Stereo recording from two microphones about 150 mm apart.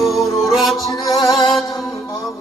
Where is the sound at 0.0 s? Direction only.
Centre (ahead or behind).